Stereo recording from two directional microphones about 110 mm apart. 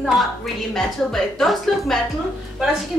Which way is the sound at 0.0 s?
Centre (ahead or behind).